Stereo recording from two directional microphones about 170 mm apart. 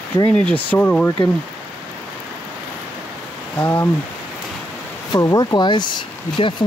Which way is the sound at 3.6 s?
15° left (ahead or behind).